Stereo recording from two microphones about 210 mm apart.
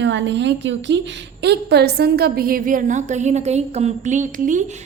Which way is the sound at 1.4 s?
50° right (ahead or behind).